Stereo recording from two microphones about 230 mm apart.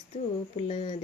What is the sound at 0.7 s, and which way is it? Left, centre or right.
Speech, left.